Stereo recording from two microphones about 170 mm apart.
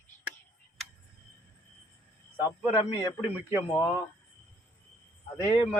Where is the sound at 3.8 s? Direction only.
20° left (ahead or behind).